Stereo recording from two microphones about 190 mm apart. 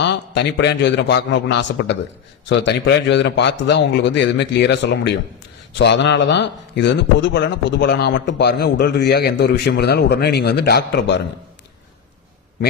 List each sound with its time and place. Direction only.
0.0 s a man's voice: 65° left (ahead or behind)